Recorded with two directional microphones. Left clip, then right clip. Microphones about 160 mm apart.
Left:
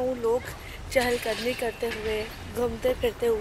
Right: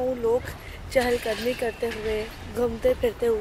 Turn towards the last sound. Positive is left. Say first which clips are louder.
# right 2 dB
turn(degrees=-25)  # may be behind; listen again after turning